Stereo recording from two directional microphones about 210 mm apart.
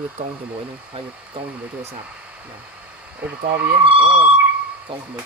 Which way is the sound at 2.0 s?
5° right (ahead or behind).